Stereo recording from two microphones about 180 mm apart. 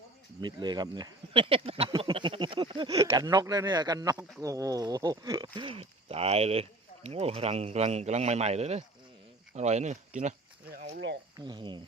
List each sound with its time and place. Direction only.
0.4 s speech: 25° right (ahead or behind); by 10.3 s 40° right (ahead or behind)
10.7 s speech: 60° right (ahead or behind)
11.3 s speech: 25° right (ahead or behind)